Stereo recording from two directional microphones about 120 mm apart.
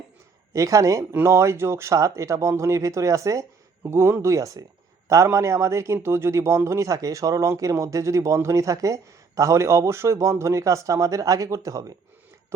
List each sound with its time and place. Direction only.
0.5 s a man's voice: 25° right (ahead or behind)